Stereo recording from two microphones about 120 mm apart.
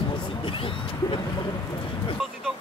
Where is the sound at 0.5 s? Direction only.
45° left (ahead or behind).